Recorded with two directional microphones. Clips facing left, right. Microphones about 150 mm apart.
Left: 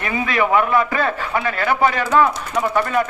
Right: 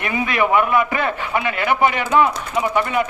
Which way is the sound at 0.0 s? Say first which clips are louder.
Even; 20° right (ahead or behind).